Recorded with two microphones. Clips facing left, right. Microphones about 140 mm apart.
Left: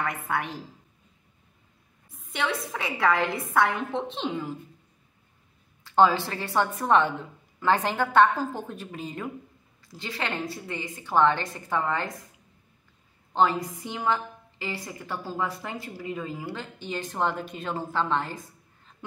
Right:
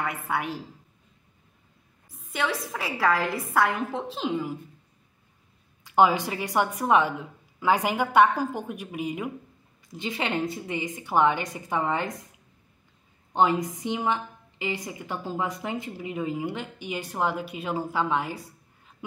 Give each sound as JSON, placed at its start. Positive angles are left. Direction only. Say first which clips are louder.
{"t": 0.0, "sound": "a woman's voice", "louder": "even", "side_deg": -5}
{"t": 2.0, "sound": "a woman's voice", "louder": "right 1 dB", "side_deg": 0}
{"t": 5.9, "sound": "a woman's voice", "louder": "even", "side_deg": -15}
{"t": 13.3, "sound": "a woman's voice", "louder": "right 1 dB", "side_deg": -20}